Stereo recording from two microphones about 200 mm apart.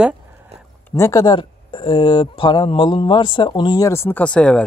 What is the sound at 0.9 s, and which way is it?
Speech, 15° left (ahead or behind).